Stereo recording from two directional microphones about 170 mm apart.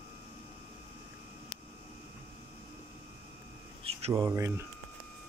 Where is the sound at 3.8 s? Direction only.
35° right (ahead or behind).